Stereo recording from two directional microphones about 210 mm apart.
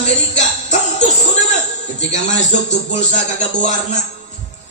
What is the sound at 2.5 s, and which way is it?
Speech, 35° left (ahead or behind).